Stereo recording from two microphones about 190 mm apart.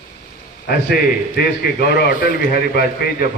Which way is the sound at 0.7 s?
55° left (ahead or behind).